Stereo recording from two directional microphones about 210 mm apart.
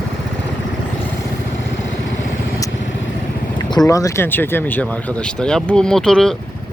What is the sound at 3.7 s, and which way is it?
Speech, 15° left (ahead or behind).